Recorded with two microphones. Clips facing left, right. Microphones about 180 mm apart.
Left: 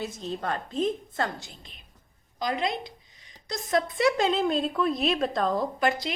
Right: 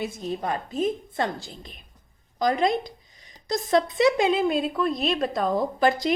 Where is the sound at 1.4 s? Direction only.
40° right (ahead or behind); by 5.6 s 10° right (ahead or behind).